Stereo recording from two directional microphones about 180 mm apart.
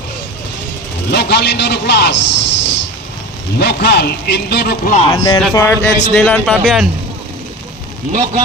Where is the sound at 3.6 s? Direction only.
70° left (ahead or behind).